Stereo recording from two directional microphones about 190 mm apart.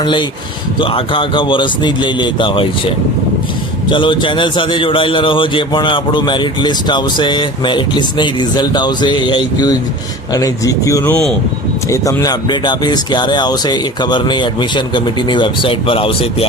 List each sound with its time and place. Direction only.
0.0 s a man's voice: 25° left (ahead or behind)